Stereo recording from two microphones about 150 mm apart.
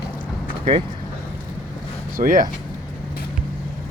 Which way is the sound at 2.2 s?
65° right (ahead or behind).